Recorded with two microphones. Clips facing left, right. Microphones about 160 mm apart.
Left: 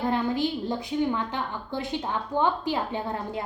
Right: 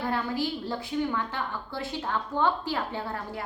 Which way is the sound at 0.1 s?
20° left (ahead or behind).